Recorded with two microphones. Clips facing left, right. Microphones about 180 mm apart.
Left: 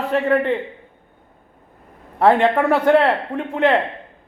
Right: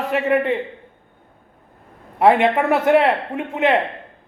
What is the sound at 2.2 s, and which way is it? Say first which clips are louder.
A man's voice: even; 10° right (ahead or behind).